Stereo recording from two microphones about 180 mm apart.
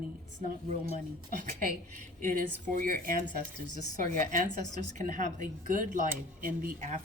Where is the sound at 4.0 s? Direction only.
50° right (ahead or behind).